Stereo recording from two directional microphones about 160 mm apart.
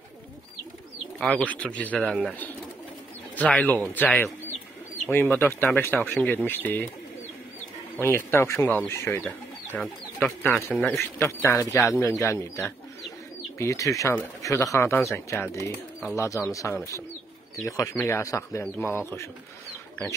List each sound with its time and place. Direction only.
1.2 s speech: 10° left (ahead or behind)
7.9 s speech: 15° left (ahead or behind)